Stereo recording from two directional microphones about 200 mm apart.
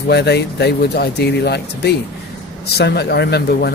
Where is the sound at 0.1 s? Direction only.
55° left (ahead or behind).